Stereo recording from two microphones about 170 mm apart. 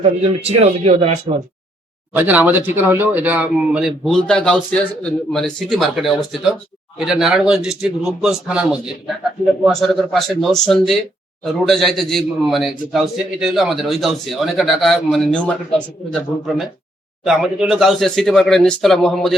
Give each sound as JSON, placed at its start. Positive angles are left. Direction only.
{"t": 0.0, "sound": "speech", "side_deg": -35}
{"t": 2.1, "sound": "speech", "side_deg": -10}
{"t": 17.2, "sound": "speech", "side_deg": 0}